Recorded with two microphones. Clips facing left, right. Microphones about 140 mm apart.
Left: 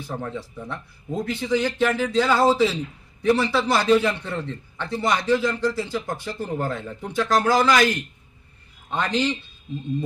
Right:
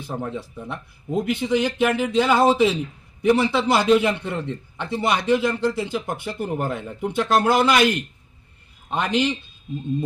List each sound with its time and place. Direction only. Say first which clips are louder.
0.1 s a man's voice: right 2 dB; 15° right (ahead or behind)